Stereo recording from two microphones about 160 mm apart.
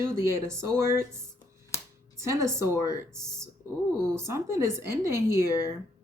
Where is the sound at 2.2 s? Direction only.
20° right (ahead or behind).